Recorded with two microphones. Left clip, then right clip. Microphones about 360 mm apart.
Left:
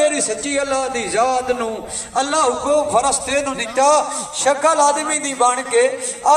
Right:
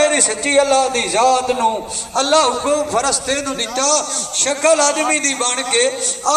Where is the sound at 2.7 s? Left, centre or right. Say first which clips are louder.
Left 1 dB; centre.